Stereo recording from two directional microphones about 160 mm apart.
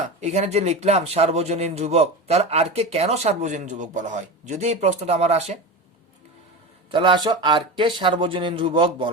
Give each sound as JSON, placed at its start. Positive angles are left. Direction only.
{"t": 0.0, "sound": "speech", "side_deg": -45}
{"t": 6.9, "sound": "speech", "side_deg": -30}